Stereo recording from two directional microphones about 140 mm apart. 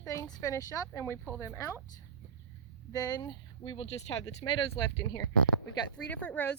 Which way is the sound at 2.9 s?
25° left (ahead or behind).